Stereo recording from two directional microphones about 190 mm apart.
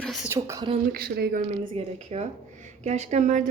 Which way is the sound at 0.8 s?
50° right (ahead or behind).